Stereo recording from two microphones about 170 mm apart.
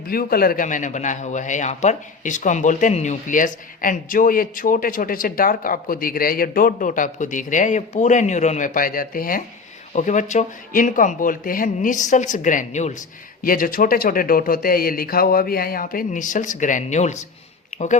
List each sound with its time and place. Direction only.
0.1 s a man's voice: 60° left (ahead or behind)
9.9 s a man's voice: 45° left (ahead or behind)
13.4 s speech: 55° left (ahead or behind)